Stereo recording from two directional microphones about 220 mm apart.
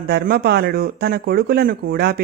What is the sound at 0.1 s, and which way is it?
Speech, 45° right (ahead or behind).